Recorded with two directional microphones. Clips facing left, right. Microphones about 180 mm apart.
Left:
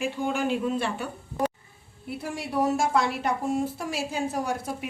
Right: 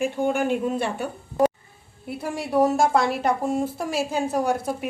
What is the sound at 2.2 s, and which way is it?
A woman's voice, 45° right (ahead or behind).